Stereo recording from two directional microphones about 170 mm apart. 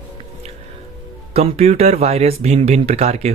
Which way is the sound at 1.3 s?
40° right (ahead or behind).